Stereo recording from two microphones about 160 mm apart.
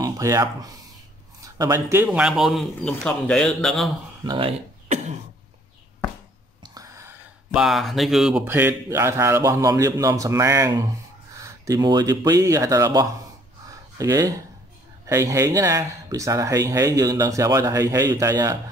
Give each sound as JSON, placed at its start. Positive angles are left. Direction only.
{"t": 0.0, "sound": "speech", "side_deg": -20}
{"t": 2.0, "sound": "speech", "side_deg": -5}
{"t": 4.2, "sound": "speech", "side_deg": -30}
{"t": 4.8, "sound": "cough", "side_deg": -50}
{"t": 6.6, "sound": "whispering", "side_deg": -20}
{"t": 7.5, "sound": "speech", "side_deg": 0}